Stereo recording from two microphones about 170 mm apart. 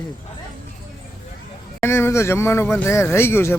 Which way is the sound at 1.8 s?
15° left (ahead or behind).